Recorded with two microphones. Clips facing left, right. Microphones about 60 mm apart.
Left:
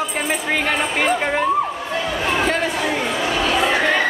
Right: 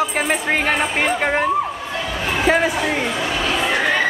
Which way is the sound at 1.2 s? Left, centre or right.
Centre.